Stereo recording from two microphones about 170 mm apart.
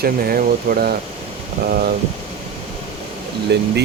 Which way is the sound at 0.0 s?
60° right (ahead or behind).